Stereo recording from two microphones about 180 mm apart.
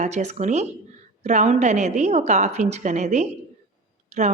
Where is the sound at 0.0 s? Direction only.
40° right (ahead or behind).